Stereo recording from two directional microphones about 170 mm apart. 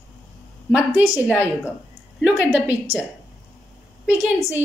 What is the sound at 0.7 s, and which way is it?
A woman's voice, 5° right (ahead or behind).